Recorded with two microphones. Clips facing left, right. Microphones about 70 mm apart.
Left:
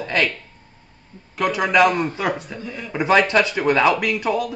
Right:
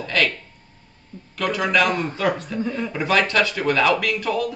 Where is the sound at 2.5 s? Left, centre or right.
Right.